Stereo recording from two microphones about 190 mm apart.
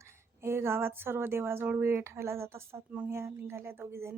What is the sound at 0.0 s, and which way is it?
Speech, 15° right (ahead or behind).